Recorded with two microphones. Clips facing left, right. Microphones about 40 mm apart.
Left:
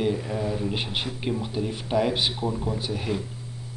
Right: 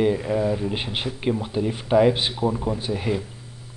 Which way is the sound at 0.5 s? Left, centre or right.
Centre.